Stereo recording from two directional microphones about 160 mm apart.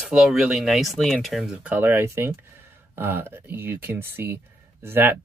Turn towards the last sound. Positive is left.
turn(degrees=-15)  # may be behind; listen again after turning